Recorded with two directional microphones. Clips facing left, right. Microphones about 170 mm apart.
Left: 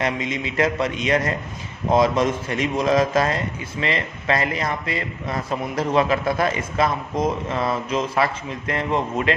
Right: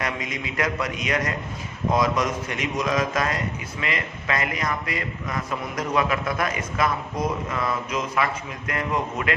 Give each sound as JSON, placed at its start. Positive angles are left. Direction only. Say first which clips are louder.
{"t": 0.0, "sound": "a man's voice", "louder": "left 5 dB", "side_deg": 25}